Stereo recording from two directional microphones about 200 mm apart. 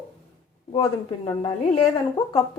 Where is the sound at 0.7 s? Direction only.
25° left (ahead or behind).